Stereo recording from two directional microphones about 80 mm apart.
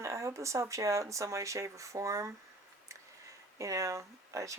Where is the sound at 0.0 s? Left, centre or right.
Right.